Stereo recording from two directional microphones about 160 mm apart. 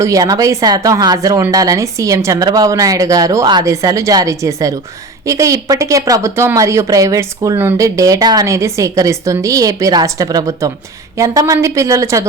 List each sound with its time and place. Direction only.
0.0 s a woman's voice: 20° right (ahead or behind)